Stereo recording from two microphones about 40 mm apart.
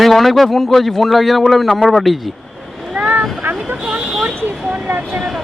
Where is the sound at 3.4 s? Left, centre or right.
Right.